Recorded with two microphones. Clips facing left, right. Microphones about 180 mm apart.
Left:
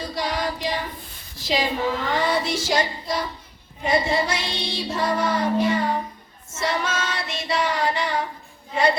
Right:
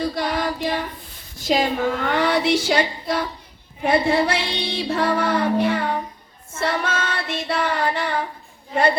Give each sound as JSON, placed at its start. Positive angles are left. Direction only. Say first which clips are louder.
{"t": 0.0, "sound": "child singing", "louder": "right 3 dB", "side_deg": -55}